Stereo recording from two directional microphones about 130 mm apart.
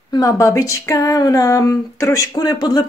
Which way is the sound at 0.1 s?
25° left (ahead or behind).